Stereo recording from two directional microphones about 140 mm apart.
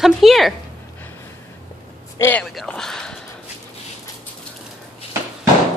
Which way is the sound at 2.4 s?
Centre (ahead or behind).